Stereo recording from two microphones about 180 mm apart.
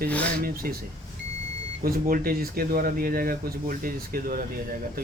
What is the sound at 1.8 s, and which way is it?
Speech, 55° right (ahead or behind).